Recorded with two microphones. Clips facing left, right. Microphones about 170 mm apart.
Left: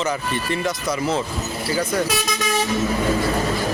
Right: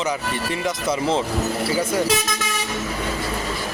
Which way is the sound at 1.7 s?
10° right (ahead or behind).